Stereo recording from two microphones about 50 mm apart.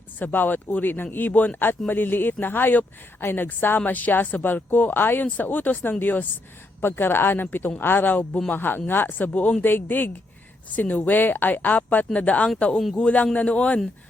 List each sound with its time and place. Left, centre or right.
0.2 s a man's voice: left